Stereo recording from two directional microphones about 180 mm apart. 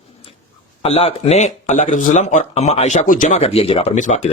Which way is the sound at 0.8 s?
35° left (ahead or behind).